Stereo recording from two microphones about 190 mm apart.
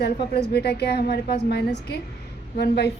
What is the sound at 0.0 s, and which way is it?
A woman's voice, 60° left (ahead or behind).